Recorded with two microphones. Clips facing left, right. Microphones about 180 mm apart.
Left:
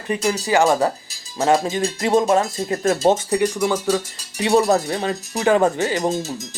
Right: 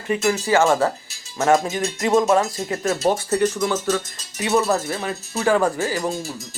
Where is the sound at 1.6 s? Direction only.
30° left (ahead or behind).